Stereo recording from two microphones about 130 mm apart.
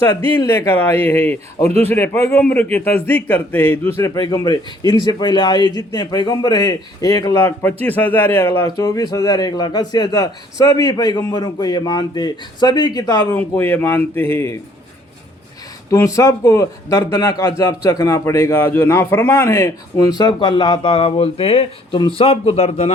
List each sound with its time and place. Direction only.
0.4 s a man's voice: 15° left (ahead or behind)
13.3 s a man's voice: 15° left (ahead or behind)
15.9 s a man's voice: 25° left (ahead or behind); by 22.9 s 50° left (ahead or behind)